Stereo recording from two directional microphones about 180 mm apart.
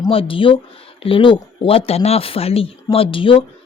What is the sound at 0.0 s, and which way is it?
Speech, 30° left (ahead or behind).